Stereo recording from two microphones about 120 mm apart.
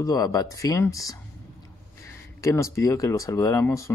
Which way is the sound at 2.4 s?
25° left (ahead or behind).